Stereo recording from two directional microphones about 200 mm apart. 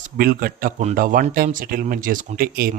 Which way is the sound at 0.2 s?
45° right (ahead or behind).